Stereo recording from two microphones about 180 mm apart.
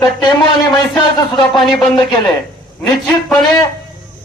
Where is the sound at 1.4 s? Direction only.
25° left (ahead or behind).